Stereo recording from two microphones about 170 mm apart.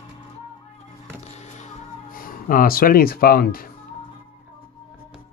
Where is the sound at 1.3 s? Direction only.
45° left (ahead or behind); by 3.6 s 60° left (ahead or behind).